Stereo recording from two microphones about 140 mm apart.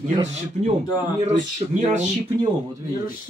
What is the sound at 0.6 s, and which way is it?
Speech, 50° right (ahead or behind).